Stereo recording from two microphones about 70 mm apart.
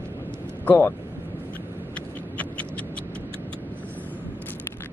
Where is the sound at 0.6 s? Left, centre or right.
Left.